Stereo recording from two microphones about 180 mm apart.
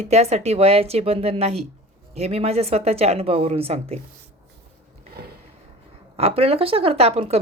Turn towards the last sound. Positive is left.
turn(degrees=-35)  # may be behind; listen again after turning